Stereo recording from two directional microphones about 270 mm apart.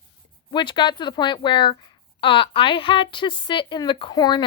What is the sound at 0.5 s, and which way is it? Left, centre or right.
A woman's voice, centre.